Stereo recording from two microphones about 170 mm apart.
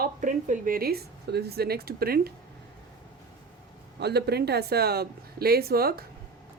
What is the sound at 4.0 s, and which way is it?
Speech, 70° right (ahead or behind).